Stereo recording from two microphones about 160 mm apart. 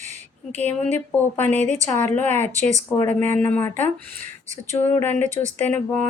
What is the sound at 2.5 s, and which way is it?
Speech, 50° right (ahead or behind).